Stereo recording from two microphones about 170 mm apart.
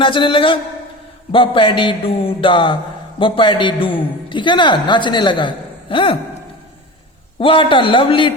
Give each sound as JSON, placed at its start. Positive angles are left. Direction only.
{"t": 0.0, "sound": "a man's voice", "side_deg": 30}
{"t": 7.3, "sound": "a man's voice", "side_deg": 30}